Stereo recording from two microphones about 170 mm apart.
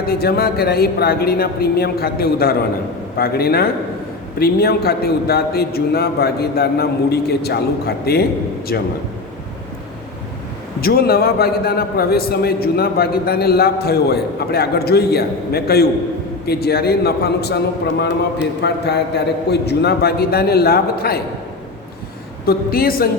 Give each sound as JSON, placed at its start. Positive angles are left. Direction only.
{"t": 0.0, "sound": "a man's voice", "side_deg": 65}
{"t": 10.8, "sound": "a man's voice", "side_deg": 60}
{"t": 18.6, "sound": "a man's voice", "side_deg": 75}
{"t": 22.4, "sound": "speech", "side_deg": 60}